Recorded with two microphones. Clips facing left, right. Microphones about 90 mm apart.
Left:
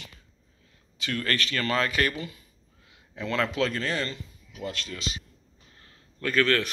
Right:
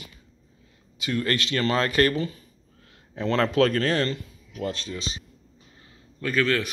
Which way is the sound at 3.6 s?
50° right (ahead or behind).